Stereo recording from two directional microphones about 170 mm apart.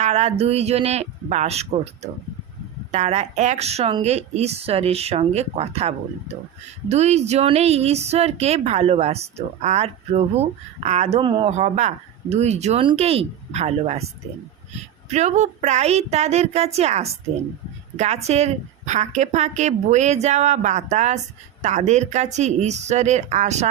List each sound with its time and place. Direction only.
0.0 s speech: 40° right (ahead or behind)
11.2 s speech: 30° right (ahead or behind)
11.5 s a woman's voice: 40° right (ahead or behind)